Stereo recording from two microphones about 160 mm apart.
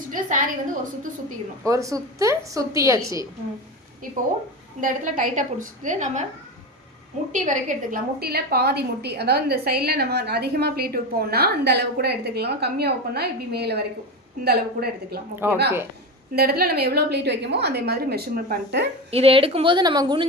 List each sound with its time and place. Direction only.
0.1 s a woman's voice: 55° right (ahead or behind)
1.6 s a woman's voice: 20° right (ahead or behind)
4.8 s a woman's voice: 60° right (ahead or behind)
7.3 s a woman's voice: 50° right (ahead or behind); by 13.8 s 90° right
14.4 s a woman's voice: 80° right
15.4 s speech: 10° right (ahead or behind)
16.3 s a woman's voice: 70° right (ahead or behind)
19.1 s speech: 35° right (ahead or behind)